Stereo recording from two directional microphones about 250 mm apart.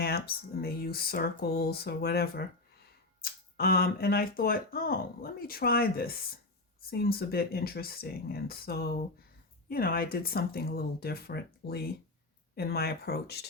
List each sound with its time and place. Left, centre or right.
0.0 s speech: left